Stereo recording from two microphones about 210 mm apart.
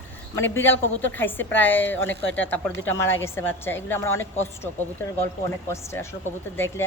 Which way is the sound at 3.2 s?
10° left (ahead or behind).